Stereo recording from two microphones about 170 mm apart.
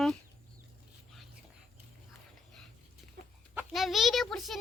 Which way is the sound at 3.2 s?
65° right (ahead or behind).